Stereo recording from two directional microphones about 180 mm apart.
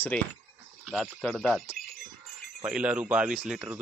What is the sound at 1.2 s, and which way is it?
Speech, 5° left (ahead or behind).